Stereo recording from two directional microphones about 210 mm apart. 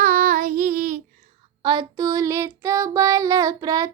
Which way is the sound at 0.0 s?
40° right (ahead or behind).